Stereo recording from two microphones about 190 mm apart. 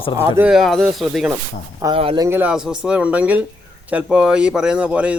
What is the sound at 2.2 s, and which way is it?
A man's voice, 10° right (ahead or behind).